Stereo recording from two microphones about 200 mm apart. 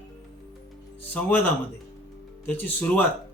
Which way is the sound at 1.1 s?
10° left (ahead or behind).